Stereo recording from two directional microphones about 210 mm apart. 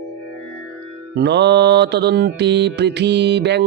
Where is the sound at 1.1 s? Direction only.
55° right (ahead or behind).